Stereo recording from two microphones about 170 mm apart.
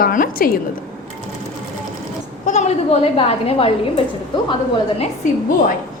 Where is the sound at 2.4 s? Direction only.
45° left (ahead or behind).